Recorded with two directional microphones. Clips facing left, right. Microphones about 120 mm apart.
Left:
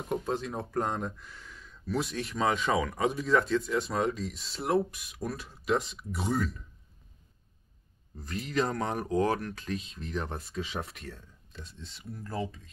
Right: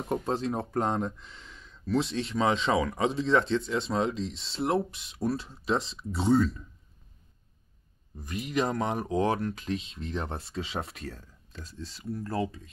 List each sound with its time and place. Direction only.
0.1 s speech: 30° right (ahead or behind)
8.2 s speech: 15° right (ahead or behind); by 12.3 s 35° right (ahead or behind)